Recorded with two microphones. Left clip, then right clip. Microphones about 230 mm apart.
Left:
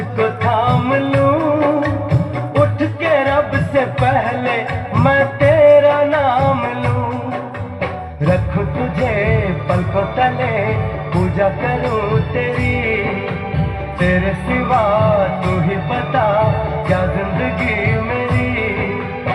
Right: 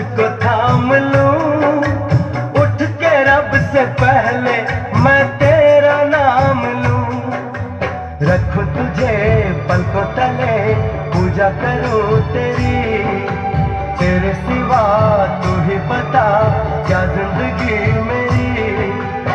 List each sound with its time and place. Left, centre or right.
0.2 s music: right
11.1 s music: right
14.7 s music: right